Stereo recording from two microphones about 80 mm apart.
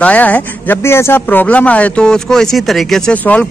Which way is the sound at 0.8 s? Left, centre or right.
Left.